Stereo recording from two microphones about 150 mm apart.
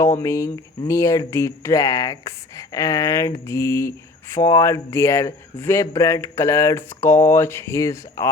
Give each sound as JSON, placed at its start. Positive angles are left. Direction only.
{"t": 0.0, "sound": "speech", "side_deg": 20}